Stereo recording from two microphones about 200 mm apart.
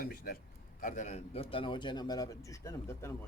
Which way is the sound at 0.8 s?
40° left (ahead or behind).